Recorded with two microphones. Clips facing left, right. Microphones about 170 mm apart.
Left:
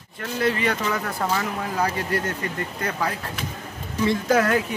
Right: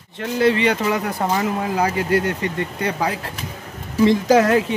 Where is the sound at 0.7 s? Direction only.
20° right (ahead or behind).